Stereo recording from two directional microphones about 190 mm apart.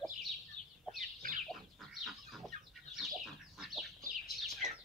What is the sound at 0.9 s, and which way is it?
Chicken, 45° right (ahead or behind).